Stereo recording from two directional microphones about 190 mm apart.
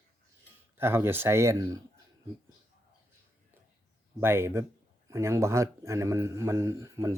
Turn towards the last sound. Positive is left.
turn(degrees=-15)  # may be behind; listen again after turning